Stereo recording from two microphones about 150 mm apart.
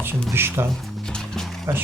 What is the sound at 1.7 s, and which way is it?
Speech, 15° right (ahead or behind).